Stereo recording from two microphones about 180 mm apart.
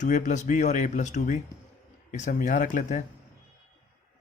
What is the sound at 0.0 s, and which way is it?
A man's voice, 40° left (ahead or behind).